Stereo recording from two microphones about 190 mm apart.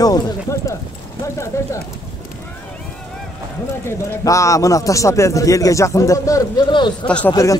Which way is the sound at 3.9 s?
15° left (ahead or behind).